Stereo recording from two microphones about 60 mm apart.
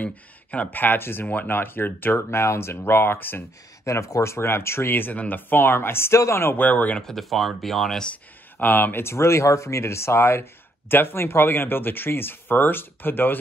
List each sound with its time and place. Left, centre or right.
0.0 s speech: left
1.2 s speech: left
3.8 s speech: left
5.1 s speech: left
6.6 s speech: left
7.0 s speech: centre
8.5 s speech: left
9.0 s speech: left